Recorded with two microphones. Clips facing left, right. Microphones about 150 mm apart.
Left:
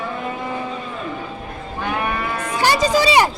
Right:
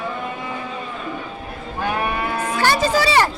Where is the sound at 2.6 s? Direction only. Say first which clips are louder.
Left 2 dB; 15° left (ahead or behind).